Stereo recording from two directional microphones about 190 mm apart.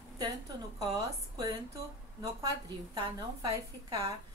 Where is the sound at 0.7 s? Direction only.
20° right (ahead or behind).